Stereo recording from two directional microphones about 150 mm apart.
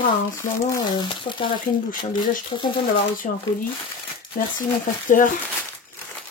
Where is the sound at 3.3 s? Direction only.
65° left (ahead or behind).